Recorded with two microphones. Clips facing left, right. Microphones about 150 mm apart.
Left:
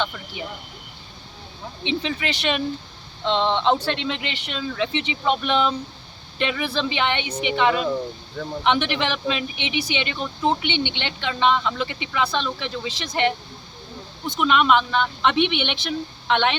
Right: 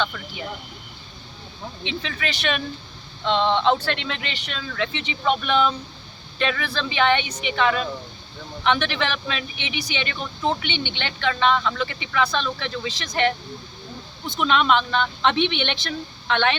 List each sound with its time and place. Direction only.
1.8 s speech: 25° left (ahead or behind)
14.3 s speech: 10° left (ahead or behind)